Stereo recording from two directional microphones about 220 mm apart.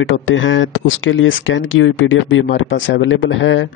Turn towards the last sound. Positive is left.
turn(degrees=60)  # may be behind; listen again after turning